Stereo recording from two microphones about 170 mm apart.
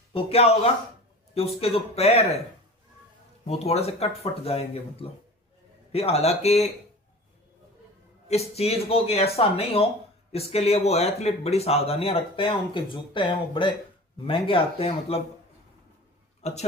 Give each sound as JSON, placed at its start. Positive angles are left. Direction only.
{"t": 0.1, "sound": "speech", "side_deg": 35}
{"t": 3.4, "sound": "speech", "side_deg": 40}
{"t": 8.3, "sound": "speech", "side_deg": 35}
{"t": 16.4, "sound": "speech", "side_deg": 40}